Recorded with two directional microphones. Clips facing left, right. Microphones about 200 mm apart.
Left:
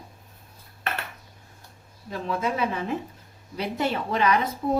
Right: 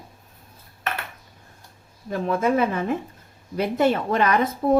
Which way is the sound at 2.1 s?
50° right (ahead or behind).